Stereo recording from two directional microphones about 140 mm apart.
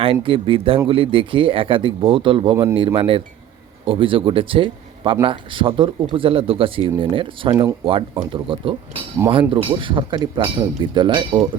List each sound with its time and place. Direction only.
0.0 s speech: 40° right (ahead or behind)